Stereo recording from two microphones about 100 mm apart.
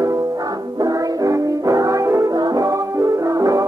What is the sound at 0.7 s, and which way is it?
Music, 40° right (ahead or behind).